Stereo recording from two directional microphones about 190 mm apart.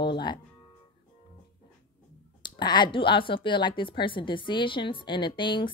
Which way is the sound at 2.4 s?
25° left (ahead or behind).